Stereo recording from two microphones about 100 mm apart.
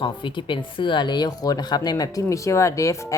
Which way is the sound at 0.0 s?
55° left (ahead or behind).